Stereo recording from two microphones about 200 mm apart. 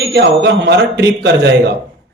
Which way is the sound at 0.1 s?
60° right (ahead or behind).